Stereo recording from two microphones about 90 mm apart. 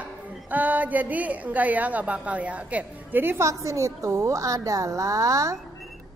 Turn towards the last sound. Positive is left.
turn(degrees=-35)  # may be behind; listen again after turning